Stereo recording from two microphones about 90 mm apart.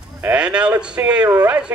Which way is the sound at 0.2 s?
15° right (ahead or behind).